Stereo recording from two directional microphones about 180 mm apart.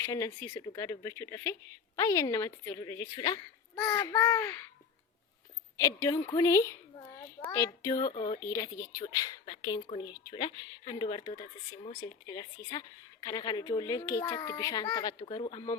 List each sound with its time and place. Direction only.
0.0 s speech: 15° left (ahead or behind)
5.7 s a woman's voice: 20° left (ahead or behind)